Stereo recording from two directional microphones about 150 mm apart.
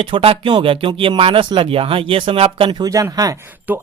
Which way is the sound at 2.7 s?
25° right (ahead or behind).